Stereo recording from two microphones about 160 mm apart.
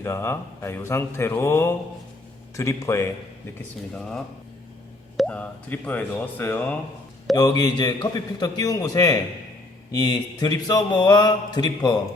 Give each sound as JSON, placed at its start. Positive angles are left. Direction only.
{"t": 0.0, "sound": "speech", "side_deg": 15}
{"t": 3.9, "sound": "speech", "side_deg": 5}
{"t": 7.3, "sound": "speech", "side_deg": 25}